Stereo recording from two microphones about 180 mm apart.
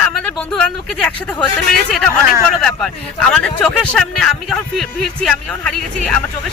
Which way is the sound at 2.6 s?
5° left (ahead or behind).